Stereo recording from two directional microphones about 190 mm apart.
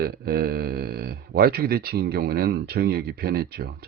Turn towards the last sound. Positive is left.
turn(degrees=-55)  # may be behind; listen again after turning